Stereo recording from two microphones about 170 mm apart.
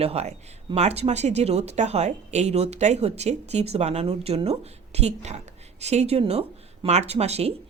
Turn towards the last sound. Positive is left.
turn(degrees=-40)  # may be behind; listen again after turning